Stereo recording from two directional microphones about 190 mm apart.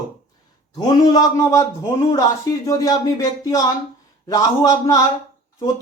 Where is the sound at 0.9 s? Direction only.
20° left (ahead or behind).